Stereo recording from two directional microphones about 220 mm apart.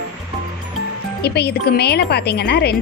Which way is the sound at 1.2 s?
50° left (ahead or behind).